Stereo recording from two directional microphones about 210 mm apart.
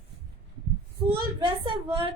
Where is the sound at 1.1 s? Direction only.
25° right (ahead or behind).